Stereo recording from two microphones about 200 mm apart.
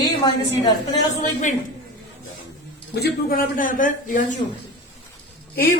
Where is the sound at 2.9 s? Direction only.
50° left (ahead or behind).